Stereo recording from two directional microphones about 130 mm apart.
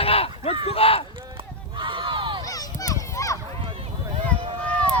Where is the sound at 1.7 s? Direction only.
40° right (ahead or behind).